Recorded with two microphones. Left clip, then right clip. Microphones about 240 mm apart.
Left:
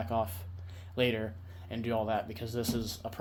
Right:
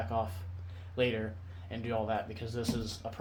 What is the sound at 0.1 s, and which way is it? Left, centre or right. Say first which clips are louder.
Speech: left 4 dB; left.